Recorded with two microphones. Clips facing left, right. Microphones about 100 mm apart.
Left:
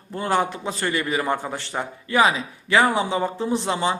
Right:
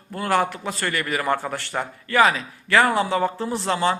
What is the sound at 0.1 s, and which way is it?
Speech, 20° left (ahead or behind).